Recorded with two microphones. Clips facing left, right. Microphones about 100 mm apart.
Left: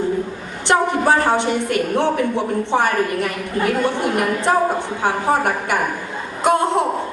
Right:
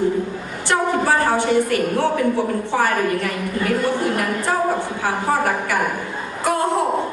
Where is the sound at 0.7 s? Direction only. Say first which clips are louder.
Left 2 dB; 20° left (ahead or behind).